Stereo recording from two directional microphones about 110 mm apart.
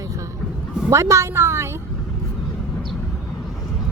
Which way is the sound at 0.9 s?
25° right (ahead or behind).